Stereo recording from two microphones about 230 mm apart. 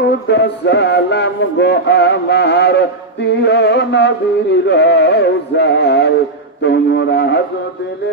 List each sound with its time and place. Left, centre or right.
0.3 s music: left